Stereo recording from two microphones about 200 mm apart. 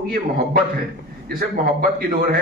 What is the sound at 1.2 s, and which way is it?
A man's voice, 45° right (ahead or behind).